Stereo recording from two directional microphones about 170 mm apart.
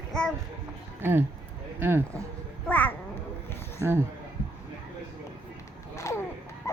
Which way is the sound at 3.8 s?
15° right (ahead or behind).